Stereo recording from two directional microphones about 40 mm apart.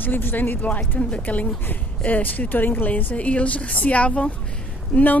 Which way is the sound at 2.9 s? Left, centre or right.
Left.